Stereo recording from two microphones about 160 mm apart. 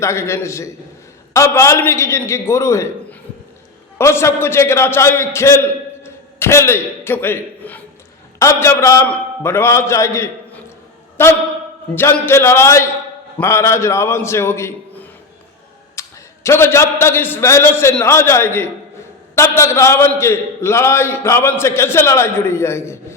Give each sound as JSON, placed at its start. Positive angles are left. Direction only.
{"t": 0.0, "sound": "a man's voice", "side_deg": 15}